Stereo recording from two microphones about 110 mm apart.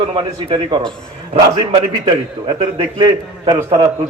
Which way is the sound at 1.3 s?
60° right (ahead or behind).